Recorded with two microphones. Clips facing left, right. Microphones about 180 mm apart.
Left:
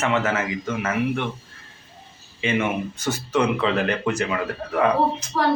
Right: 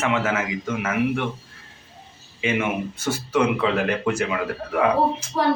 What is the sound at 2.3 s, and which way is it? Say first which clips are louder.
Speech: even; 5° right (ahead or behind).